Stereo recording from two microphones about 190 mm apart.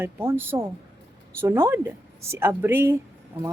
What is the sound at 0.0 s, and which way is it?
A woman's voice, 10° right (ahead or behind).